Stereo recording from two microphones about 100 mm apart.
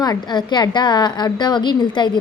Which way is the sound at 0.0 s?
45° left (ahead or behind).